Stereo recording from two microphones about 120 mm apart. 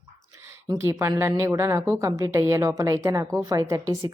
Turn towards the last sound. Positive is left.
turn(degrees=-30)  # may be behind; listen again after turning